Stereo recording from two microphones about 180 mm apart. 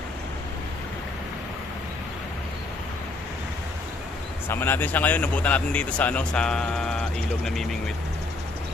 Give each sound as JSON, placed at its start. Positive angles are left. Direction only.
{"t": 4.4, "sound": "speech", "side_deg": 10}